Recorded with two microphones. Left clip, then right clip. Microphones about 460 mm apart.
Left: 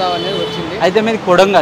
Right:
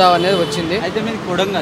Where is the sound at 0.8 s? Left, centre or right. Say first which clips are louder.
Left 8 dB; left.